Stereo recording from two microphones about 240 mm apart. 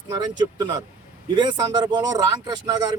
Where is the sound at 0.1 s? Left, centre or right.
Centre.